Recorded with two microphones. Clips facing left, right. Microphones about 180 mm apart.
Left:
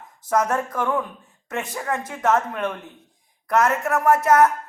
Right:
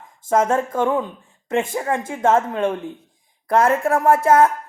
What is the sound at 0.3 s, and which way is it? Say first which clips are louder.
A woman's voice: right 4 dB; 25° right (ahead or behind).